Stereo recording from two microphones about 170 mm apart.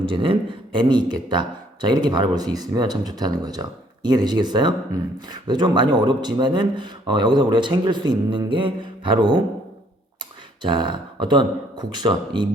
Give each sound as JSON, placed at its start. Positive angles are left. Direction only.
{"t": 0.0, "sound": "speech", "side_deg": -30}
{"t": 10.6, "sound": "speech", "side_deg": -25}